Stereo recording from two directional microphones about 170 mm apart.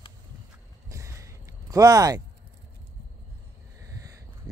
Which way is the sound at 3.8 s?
20° right (ahead or behind).